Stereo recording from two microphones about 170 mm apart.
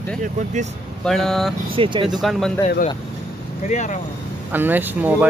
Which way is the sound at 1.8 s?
30° right (ahead or behind).